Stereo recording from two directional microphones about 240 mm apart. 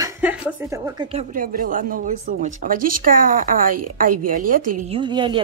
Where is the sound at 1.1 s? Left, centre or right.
Right.